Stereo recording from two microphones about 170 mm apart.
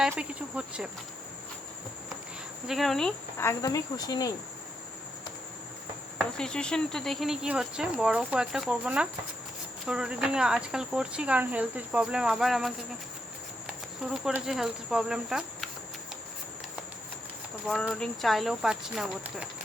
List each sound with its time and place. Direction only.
0.2 s cricket: 5° right (ahead or behind)
2.6 s speech: centre (ahead or behind)
3.3 s speech: 15° left (ahead or behind)
6.1 s speech: 5° left (ahead or behind)
14.1 s speech: 5° right (ahead or behind)
17.7 s speech: centre (ahead or behind)